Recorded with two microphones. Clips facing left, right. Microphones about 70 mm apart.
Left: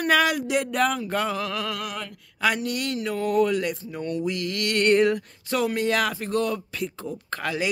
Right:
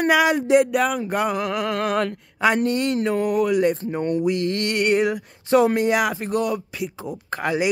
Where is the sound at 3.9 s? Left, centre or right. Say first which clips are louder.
Right 6 dB; right.